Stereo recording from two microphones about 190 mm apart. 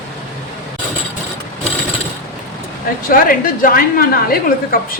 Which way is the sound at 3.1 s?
45° left (ahead or behind).